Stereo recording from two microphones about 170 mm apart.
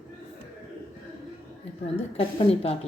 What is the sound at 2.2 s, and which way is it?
Speech, 35° left (ahead or behind).